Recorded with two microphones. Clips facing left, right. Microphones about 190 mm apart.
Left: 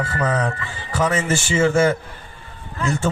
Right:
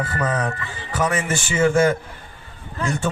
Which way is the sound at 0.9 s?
30° left (ahead or behind).